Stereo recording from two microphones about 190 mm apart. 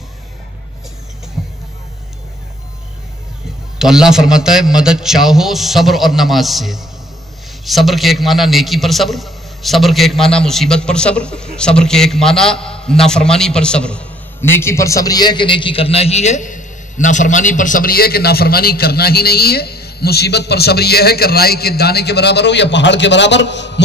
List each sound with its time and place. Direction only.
3.7 s a man's voice: 5° right (ahead or behind); by 23.8 s 70° left (ahead or behind)